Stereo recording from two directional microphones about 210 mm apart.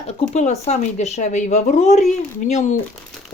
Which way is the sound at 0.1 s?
30° left (ahead or behind).